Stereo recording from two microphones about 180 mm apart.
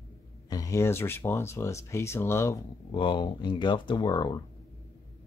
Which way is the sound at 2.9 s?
25° left (ahead or behind).